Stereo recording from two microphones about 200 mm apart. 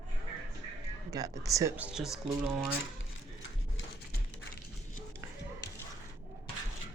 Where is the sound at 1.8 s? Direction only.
Centre (ahead or behind).